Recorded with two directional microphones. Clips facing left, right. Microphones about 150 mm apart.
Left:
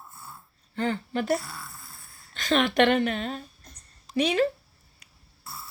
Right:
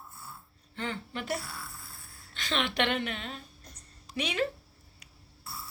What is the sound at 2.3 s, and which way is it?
A woman's voice, 45° left (ahead or behind).